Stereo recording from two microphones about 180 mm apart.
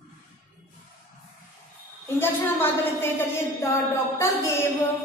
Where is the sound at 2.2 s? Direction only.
10° left (ahead or behind).